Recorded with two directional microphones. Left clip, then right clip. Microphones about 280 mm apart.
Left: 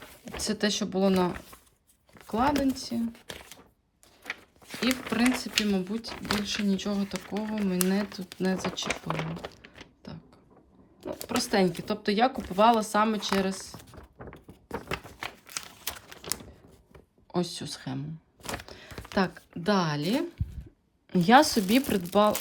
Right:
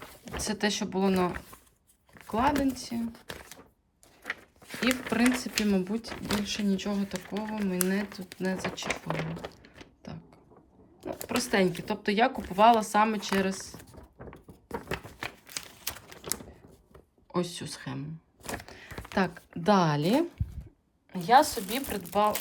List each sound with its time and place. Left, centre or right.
0.0 s speech: centre
2.1 s a sound: centre
2.5 s speech: centre
3.2 s camera: centre
4.2 s speech: centre
11.0 s a sound: centre
21.7 s speech: left